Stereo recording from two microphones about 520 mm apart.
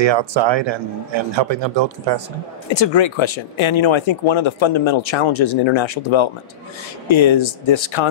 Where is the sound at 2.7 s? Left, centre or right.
Left.